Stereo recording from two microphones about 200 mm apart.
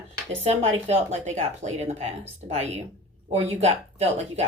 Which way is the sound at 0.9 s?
35° right (ahead or behind).